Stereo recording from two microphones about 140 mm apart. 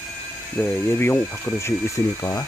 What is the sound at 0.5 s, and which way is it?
Speech, 15° left (ahead or behind).